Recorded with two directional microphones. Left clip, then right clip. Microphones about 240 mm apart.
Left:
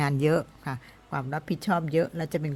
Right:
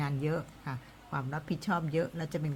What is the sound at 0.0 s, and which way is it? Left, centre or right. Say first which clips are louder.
Speech: left 10 dB; left.